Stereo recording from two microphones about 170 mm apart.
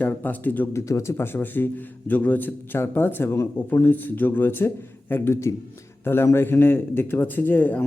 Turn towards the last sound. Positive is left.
turn(degrees=10)  # may be behind; listen again after turning